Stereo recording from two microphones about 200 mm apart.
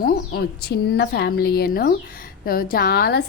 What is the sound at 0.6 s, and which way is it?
Speech, 55° left (ahead or behind).